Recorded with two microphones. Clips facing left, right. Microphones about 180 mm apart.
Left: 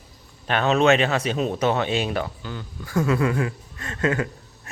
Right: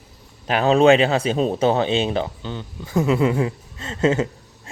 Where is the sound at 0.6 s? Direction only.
30° right (ahead or behind).